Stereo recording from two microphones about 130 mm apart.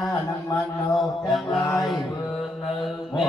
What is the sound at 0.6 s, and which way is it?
Music, centre (ahead or behind).